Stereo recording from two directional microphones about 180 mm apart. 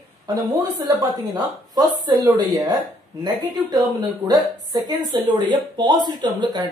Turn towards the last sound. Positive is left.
turn(degrees=-25)  # may be behind; listen again after turning